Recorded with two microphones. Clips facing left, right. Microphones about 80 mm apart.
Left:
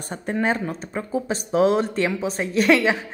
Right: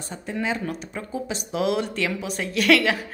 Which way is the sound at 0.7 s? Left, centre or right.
Left.